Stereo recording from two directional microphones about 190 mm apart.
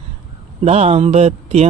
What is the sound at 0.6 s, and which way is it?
Music, 30° right (ahead or behind).